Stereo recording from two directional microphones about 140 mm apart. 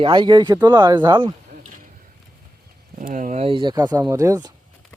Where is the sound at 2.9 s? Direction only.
65° right (ahead or behind).